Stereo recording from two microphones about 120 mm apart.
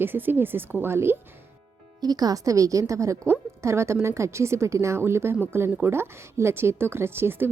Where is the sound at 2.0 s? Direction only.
35° right (ahead or behind).